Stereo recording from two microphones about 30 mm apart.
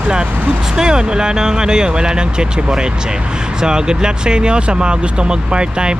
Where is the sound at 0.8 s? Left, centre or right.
Right.